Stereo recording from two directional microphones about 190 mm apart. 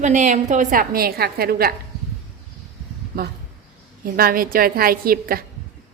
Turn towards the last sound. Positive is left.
turn(degrees=-50)  # may be behind; listen again after turning